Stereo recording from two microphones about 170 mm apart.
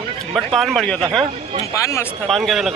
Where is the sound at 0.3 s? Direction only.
Centre (ahead or behind).